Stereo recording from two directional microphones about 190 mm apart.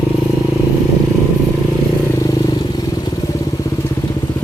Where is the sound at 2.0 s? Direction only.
20° left (ahead or behind).